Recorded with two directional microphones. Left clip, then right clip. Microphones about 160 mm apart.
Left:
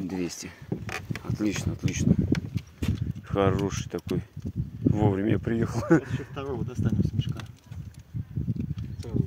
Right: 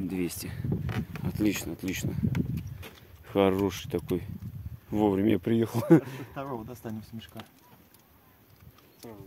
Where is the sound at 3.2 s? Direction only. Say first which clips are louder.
Right 1 dB; 40° right (ahead or behind).